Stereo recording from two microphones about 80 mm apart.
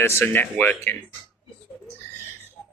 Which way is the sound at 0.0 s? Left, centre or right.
Left.